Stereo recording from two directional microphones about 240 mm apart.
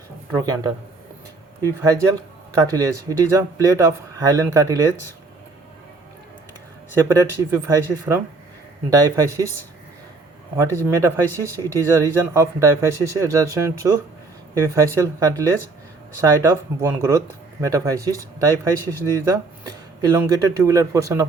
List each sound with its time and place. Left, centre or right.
0.3 s speech: centre
7.2 s speech: centre
8.9 s speech: centre
10.6 s speech: centre